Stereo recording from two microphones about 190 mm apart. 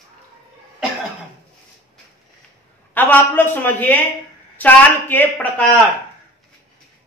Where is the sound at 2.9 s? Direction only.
10° left (ahead or behind).